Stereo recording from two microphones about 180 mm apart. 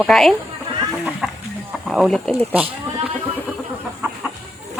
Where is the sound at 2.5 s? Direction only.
10° right (ahead or behind).